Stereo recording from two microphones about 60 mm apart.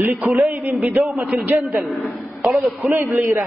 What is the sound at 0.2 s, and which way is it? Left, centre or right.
A man's voice, centre.